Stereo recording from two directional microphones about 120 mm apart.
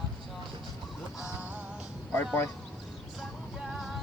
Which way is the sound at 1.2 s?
10° right (ahead or behind).